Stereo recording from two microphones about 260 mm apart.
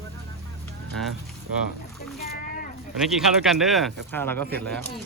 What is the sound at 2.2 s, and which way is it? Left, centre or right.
Boat, left.